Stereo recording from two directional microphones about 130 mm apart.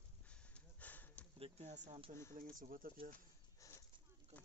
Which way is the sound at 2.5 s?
90° right.